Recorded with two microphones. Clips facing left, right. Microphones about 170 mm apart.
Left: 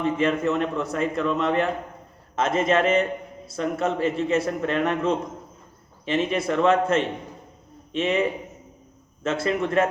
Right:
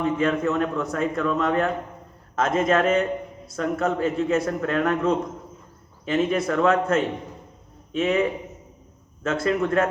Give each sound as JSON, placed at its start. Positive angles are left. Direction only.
{"t": 0.0, "sound": "a man's voice", "side_deg": 0}
{"t": 1.1, "sound": "speech", "side_deg": 30}
{"t": 2.3, "sound": "a man's voice", "side_deg": 0}